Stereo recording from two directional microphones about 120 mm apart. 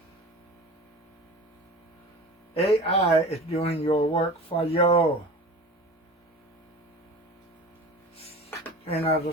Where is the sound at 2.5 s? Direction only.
60° left (ahead or behind).